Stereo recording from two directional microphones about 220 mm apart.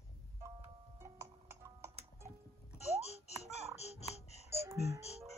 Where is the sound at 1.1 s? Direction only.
10° right (ahead or behind).